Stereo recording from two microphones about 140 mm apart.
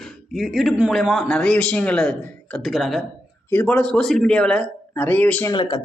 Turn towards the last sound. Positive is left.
turn(degrees=35)  # may be behind; listen again after turning